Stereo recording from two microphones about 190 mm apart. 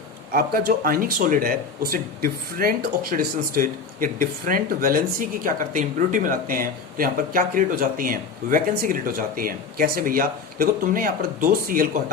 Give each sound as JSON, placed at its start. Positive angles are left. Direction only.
{"t": 0.3, "sound": "speech", "side_deg": -50}